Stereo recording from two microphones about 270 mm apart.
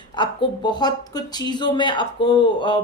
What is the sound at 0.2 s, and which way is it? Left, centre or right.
Speech, centre.